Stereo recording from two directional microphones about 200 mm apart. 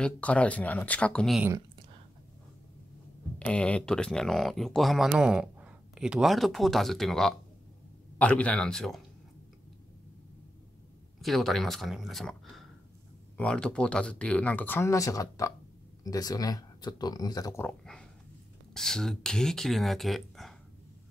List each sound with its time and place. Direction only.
0.0 s speech: 5° left (ahead or behind)
3.3 s speech: 5° left (ahead or behind)
11.1 s speech: centre (ahead or behind)